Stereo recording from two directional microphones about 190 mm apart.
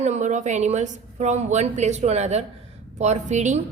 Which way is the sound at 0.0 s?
40° right (ahead or behind).